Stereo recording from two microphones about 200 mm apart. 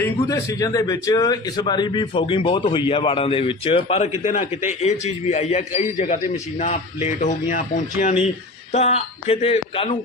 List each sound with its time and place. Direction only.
0.0 s a man's voice: 15° left (ahead or behind)